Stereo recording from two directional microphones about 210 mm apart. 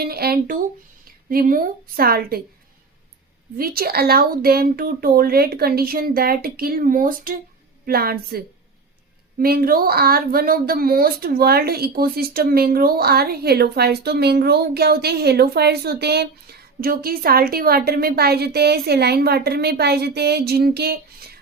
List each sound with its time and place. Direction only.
0.0 s speech: 45° right (ahead or behind)
3.6 s speech: 45° right (ahead or behind)